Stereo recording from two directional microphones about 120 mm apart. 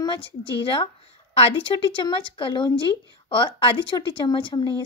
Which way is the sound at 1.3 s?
55° left (ahead or behind).